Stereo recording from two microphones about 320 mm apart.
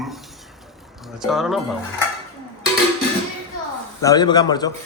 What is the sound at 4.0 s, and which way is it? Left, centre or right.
Speech, centre.